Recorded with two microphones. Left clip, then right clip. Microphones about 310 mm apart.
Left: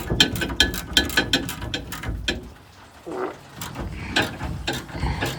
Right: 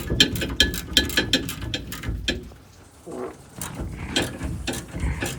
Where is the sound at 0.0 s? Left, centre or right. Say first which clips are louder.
Even; centre.